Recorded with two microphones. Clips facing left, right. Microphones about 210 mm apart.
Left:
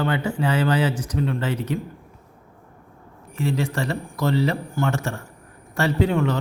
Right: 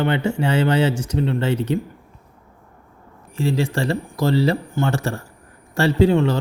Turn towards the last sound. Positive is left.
turn(degrees=-30)  # may be behind; listen again after turning